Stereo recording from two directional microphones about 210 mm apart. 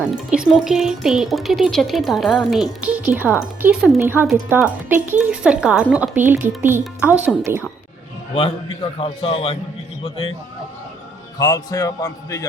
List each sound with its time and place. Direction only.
0.3 s a woman's voice: centre (ahead or behind)
8.4 s a man's voice: 25° left (ahead or behind)
11.3 s a man's voice: 20° left (ahead or behind)